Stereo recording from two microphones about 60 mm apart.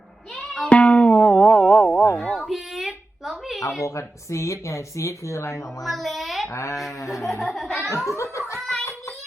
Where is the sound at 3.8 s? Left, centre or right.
Left.